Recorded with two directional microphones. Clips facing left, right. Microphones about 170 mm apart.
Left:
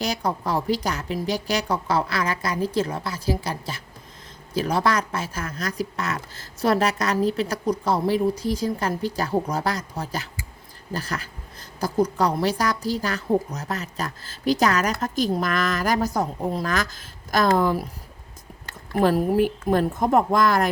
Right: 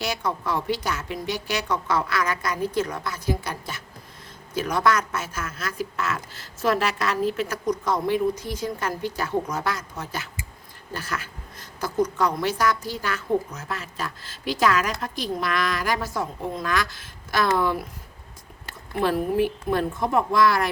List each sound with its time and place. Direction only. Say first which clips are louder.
0.0 s a woman's voice: left 2 dB; 35° left (ahead or behind)
18.9 s a woman's voice: left 3 dB; 40° left (ahead or behind)